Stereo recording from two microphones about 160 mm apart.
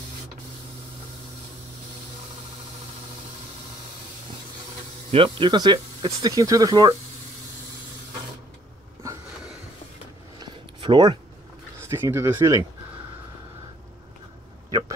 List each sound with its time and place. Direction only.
5.1 s speech: 35° right (ahead or behind)
10.4 s a sound: 30° right (ahead or behind)
11.8 s speech: 15° right (ahead or behind)
14.7 s speech: 25° right (ahead or behind)